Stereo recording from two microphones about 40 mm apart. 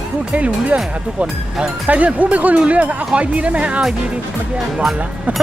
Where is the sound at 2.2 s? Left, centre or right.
Right.